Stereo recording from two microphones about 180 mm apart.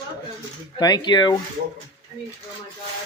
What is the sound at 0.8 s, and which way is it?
Speech, 25° left (ahead or behind).